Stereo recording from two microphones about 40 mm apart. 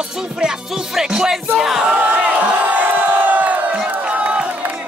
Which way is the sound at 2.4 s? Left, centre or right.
Right.